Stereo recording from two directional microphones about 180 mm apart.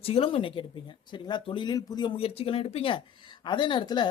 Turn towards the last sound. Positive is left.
turn(degrees=25)  # may be behind; listen again after turning